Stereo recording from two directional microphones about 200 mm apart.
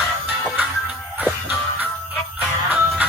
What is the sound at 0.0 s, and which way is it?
Music, 5° right (ahead or behind).